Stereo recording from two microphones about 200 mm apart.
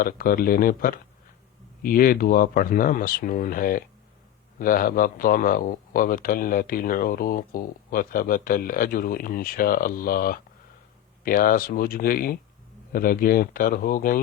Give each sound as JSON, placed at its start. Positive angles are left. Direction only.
{"t": 0.0, "sound": "a man's voice", "side_deg": 45}